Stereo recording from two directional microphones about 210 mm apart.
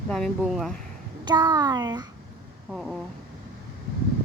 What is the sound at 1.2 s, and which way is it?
Speech, 20° right (ahead or behind).